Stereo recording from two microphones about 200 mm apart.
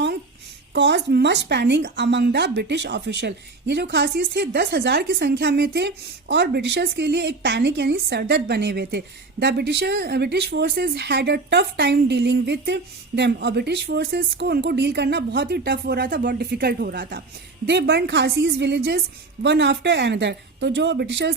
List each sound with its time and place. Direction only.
0.7 s a woman's voice: 60° right (ahead or behind)